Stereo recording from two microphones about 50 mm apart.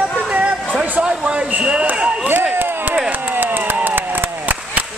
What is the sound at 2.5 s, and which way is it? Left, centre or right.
Chop, right.